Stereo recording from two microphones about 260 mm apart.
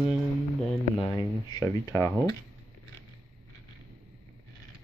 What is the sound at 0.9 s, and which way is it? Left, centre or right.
Speech, centre.